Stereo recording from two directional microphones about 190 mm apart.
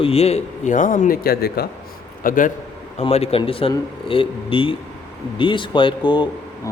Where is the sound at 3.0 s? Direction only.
30° left (ahead or behind).